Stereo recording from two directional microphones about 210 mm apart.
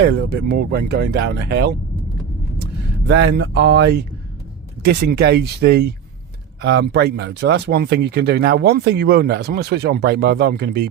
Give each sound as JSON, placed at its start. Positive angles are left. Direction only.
{"t": 0.0, "sound": "speech", "side_deg": -55}
{"t": 3.0, "sound": "speech", "side_deg": -55}